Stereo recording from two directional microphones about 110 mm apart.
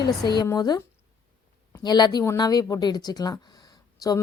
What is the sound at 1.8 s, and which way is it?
A woman's voice, 40° left (ahead or behind).